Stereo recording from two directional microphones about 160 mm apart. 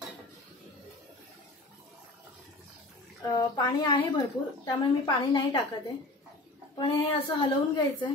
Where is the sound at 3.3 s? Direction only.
25° left (ahead or behind).